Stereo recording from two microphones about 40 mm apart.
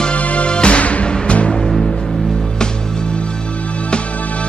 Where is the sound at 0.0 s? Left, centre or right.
Left.